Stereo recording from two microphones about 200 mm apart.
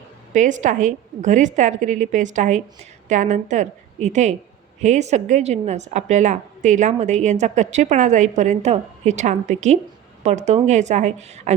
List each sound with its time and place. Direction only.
0.3 s a woman's voice: 40° right (ahead or behind)